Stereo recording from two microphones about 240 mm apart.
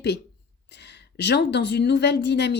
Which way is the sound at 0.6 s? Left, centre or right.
Left.